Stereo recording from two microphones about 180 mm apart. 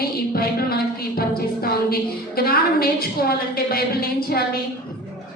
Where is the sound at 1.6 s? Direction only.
55° left (ahead or behind).